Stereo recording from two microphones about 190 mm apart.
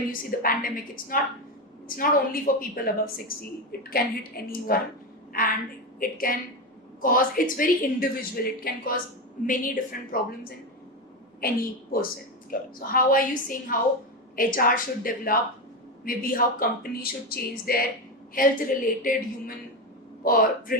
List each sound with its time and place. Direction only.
0.1 s a woman's voice: 50° left (ahead or behind)
11.3 s a woman's voice: 50° left (ahead or behind)